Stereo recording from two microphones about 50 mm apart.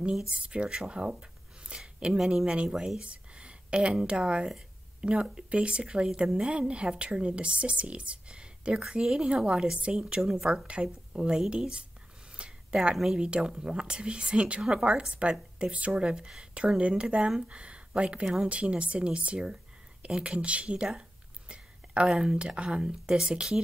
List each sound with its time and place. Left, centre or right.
0.4 s speech: right
2.7 s speech: centre
3.0 s a woman's voice: right
10.7 s speech: right
12.4 s a sound: centre
12.9 s speech: centre
13.2 s speech: centre
18.2 s speech: centre
18.5 s speech: right
22.2 s speech: centre